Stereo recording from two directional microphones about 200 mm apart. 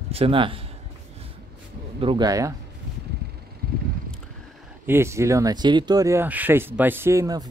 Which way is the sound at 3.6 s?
50° right (ahead or behind).